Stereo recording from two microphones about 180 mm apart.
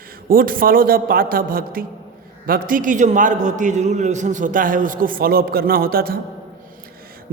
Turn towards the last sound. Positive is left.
turn(degrees=-55)  # may be behind; listen again after turning